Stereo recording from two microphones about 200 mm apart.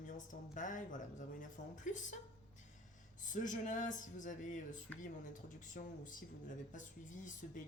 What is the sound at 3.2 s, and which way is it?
Speech, 40° left (ahead or behind).